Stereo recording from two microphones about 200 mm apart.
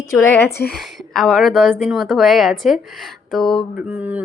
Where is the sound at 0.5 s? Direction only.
50° left (ahead or behind).